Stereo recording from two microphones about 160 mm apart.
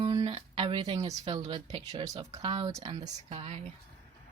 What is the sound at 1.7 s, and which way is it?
Speech, 40° right (ahead or behind).